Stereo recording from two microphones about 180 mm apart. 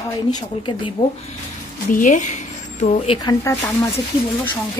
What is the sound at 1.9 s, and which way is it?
Speech, 45° left (ahead or behind).